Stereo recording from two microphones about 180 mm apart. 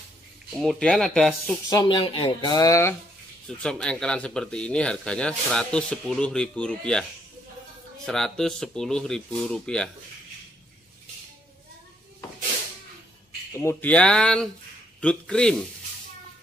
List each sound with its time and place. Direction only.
0.6 s speech: 5° left (ahead or behind)
1.7 s speech: 20° left (ahead or behind)
3.4 s speech: 5° left (ahead or behind)
13.5 s speech: 15° left (ahead or behind)